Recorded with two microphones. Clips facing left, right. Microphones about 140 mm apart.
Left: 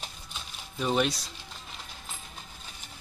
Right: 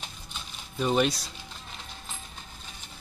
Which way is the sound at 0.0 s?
Centre (ahead or behind).